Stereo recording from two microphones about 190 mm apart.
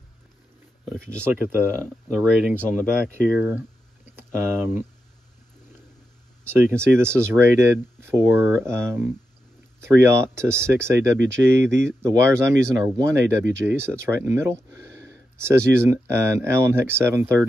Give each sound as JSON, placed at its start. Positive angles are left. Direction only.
{"t": 1.2, "sound": "speech", "side_deg": -10}
{"t": 3.3, "sound": "a sound", "side_deg": -10}
{"t": 6.4, "sound": "speech", "side_deg": -10}
{"t": 11.6, "sound": "speech", "side_deg": -70}
{"t": 12.0, "sound": "speech", "side_deg": -15}